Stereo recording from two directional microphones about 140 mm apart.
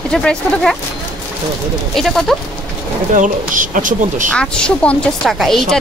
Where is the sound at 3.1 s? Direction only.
70° right (ahead or behind).